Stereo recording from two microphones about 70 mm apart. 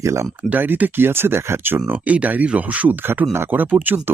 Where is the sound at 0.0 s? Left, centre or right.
Right.